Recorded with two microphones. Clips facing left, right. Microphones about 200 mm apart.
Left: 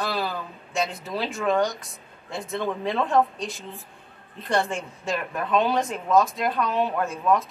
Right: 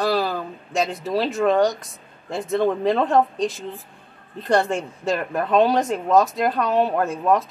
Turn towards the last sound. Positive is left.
turn(degrees=-40)  # may be behind; listen again after turning